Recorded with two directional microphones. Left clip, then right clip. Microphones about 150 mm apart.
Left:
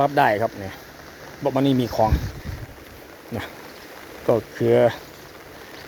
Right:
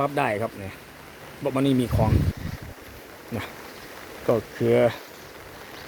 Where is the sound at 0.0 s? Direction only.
10° right (ahead or behind).